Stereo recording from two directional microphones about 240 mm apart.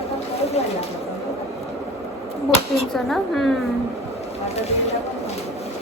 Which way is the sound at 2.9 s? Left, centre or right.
Centre.